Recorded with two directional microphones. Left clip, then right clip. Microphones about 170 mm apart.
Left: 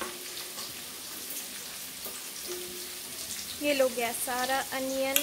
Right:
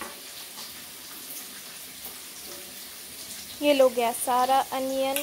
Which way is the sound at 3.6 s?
25° right (ahead or behind).